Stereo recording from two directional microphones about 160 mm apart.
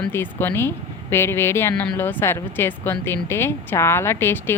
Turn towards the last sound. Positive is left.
turn(degrees=15)  # may be behind; listen again after turning